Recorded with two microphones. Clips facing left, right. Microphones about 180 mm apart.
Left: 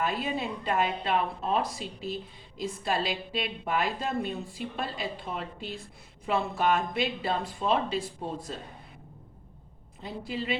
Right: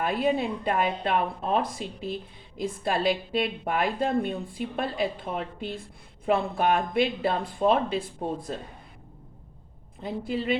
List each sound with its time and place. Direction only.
0.0 s a woman's voice: 55° right (ahead or behind)
10.0 s a woman's voice: 50° right (ahead or behind)